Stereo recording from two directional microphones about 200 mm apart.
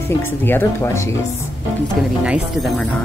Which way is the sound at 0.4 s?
10° left (ahead or behind).